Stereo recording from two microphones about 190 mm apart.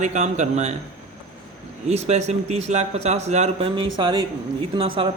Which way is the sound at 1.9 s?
35° right (ahead or behind).